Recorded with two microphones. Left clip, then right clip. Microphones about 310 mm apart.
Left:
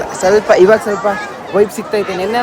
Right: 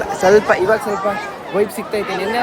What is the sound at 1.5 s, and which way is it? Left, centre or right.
Speech, centre.